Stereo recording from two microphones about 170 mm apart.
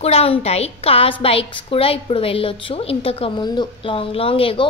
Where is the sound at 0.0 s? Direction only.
35° left (ahead or behind).